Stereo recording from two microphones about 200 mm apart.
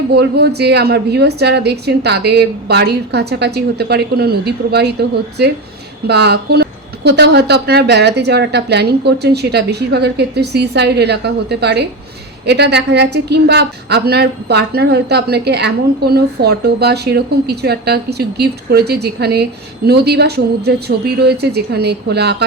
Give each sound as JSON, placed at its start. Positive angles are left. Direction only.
{"t": 0.1, "sound": "a woman's voice", "side_deg": -55}